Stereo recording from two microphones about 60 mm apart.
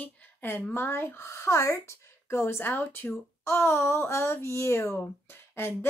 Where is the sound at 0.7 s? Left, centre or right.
Left.